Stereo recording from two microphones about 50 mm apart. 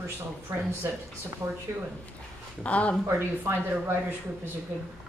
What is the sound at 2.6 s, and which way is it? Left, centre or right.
Speech, left.